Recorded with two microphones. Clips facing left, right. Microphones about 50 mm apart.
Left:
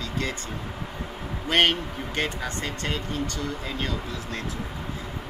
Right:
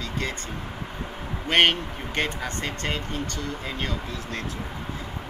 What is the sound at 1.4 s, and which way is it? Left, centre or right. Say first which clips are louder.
Speech: right 1 dB; right.